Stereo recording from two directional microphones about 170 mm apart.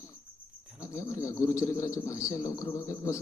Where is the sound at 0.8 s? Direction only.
15° left (ahead or behind).